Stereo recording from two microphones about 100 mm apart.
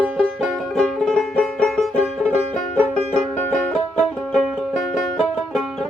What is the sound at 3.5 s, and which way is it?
Music, 15° left (ahead or behind).